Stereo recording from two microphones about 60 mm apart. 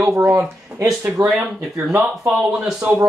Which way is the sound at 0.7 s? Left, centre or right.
Centre.